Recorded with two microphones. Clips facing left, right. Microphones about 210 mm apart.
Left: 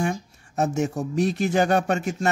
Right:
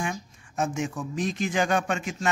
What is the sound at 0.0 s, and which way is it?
Speech, 40° left (ahead or behind).